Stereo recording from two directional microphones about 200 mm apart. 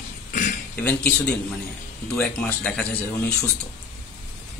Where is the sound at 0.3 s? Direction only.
45° left (ahead or behind).